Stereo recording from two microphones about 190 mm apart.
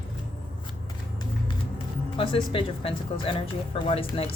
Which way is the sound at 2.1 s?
30° left (ahead or behind).